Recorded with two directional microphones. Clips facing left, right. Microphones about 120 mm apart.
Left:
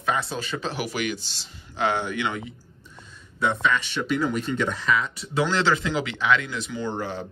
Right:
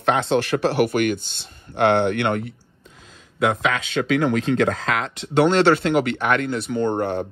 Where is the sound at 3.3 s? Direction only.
90° right; by 7.2 s 60° right (ahead or behind).